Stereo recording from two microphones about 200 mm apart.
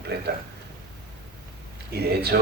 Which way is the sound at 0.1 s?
55° right (ahead or behind).